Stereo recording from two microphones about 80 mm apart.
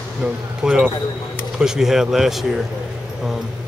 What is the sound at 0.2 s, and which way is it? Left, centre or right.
Speech, centre.